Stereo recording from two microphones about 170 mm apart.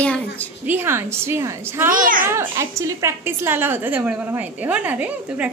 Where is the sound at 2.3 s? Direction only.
15° right (ahead or behind).